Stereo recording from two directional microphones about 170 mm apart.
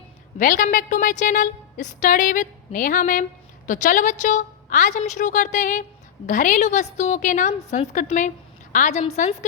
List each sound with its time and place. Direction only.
0.3 s a woman's voice: 50° left (ahead or behind)